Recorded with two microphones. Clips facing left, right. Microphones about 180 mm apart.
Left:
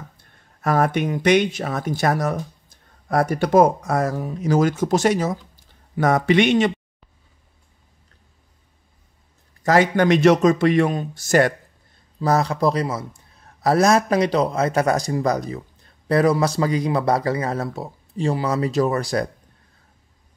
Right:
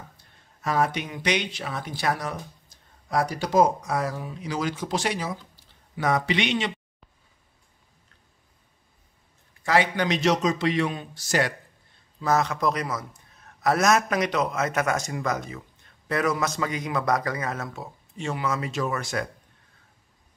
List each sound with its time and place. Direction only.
0.2 s a man's voice: 55° left (ahead or behind)
9.6 s a man's voice: 45° left (ahead or behind)
12.2 s a man's voice: 35° left (ahead or behind)